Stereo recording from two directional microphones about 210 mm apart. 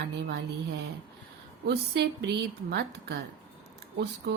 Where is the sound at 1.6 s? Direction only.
50° right (ahead or behind).